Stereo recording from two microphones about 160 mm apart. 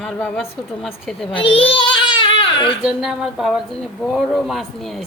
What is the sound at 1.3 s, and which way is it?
Baby cry, 35° left (ahead or behind).